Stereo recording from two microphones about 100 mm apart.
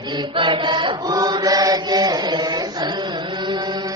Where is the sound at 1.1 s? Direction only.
40° right (ahead or behind).